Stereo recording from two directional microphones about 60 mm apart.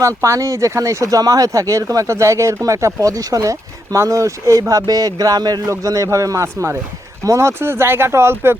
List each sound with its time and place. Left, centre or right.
0.0 s speech: right
4.7 s speech: right
5.8 s speech: right